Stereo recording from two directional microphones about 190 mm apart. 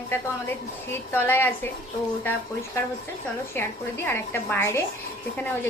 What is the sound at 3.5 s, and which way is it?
A woman's voice, 10° left (ahead or behind).